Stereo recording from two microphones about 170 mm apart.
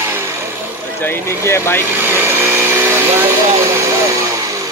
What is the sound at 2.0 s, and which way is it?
Vehicle, 15° right (ahead or behind).